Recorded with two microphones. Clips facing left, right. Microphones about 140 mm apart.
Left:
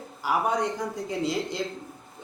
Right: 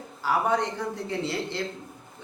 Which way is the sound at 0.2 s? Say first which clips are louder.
Right 1 dB; 10° left (ahead or behind).